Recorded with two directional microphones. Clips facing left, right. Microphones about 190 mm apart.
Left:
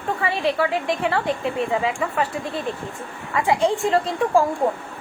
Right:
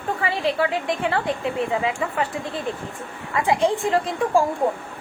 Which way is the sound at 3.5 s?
20° right (ahead or behind).